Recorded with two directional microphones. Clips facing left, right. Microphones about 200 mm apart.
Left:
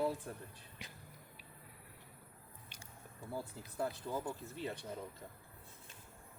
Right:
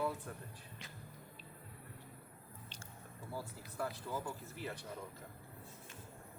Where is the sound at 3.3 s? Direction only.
20° left (ahead or behind).